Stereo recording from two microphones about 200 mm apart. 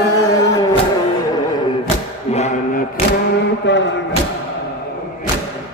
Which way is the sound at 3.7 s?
60° left (ahead or behind).